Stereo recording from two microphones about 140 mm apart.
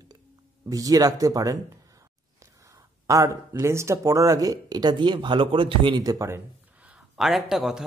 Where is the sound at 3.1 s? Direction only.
25° right (ahead or behind).